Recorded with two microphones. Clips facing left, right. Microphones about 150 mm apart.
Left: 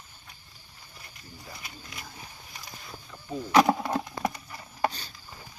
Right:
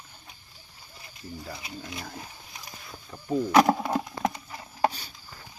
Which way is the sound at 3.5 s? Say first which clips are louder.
Even; centre (ahead or behind).